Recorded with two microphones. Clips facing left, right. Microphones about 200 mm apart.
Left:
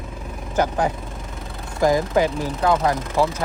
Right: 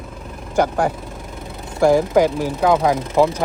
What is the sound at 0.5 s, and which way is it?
Speech, 10° right (ahead or behind).